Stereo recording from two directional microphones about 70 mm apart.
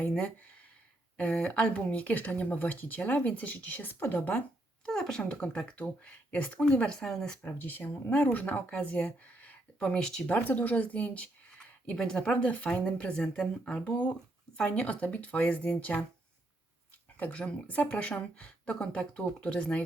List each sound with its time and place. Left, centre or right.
1.1 s speech: centre
4.9 s speech: centre
7.4 s speech: left; by 10.2 s centre
10.2 s speech: left
17.2 s speech: centre